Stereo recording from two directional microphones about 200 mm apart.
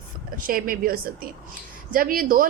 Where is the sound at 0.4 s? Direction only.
45° right (ahead or behind).